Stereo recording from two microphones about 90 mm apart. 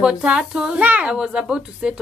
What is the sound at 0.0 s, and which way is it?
A woman's voice, 10° right (ahead or behind).